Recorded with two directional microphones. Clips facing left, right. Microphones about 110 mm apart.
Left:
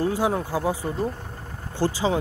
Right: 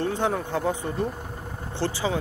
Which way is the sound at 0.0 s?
10° left (ahead or behind).